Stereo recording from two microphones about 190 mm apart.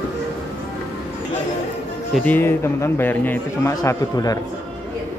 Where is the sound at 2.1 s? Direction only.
10° left (ahead or behind).